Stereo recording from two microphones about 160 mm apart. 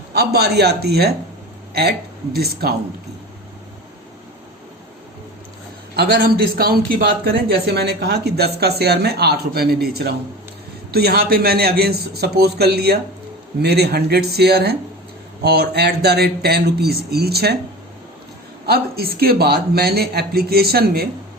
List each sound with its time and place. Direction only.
0.1 s speech: 90° right
6.0 s a man's voice: 70° right (ahead or behind)
18.6 s a man's voice: 75° right (ahead or behind)